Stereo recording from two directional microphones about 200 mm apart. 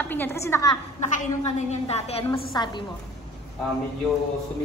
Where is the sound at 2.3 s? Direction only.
15° left (ahead or behind).